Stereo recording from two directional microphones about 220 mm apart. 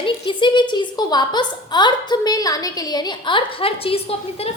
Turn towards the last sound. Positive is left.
turn(degrees=25)  # may be behind; listen again after turning